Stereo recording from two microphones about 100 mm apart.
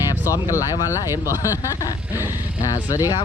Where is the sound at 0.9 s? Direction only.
25° right (ahead or behind).